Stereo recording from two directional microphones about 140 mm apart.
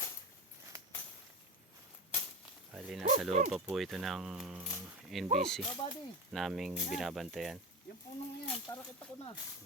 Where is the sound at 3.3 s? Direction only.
60° right (ahead or behind).